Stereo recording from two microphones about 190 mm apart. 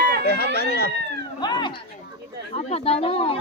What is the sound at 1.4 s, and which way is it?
Speech, 20° left (ahead or behind).